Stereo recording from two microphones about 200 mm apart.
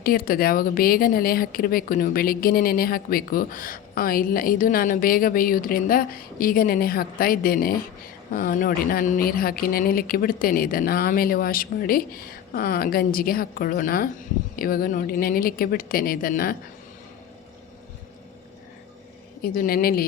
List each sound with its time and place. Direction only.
0.0 s a woman's voice: 45° left (ahead or behind)
19.4 s a woman's voice: 50° left (ahead or behind)